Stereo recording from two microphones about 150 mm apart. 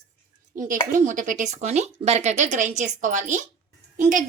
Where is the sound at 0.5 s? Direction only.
60° right (ahead or behind).